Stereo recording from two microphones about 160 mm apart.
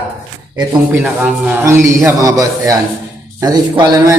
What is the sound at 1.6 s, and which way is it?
A man's voice, 15° right (ahead or behind).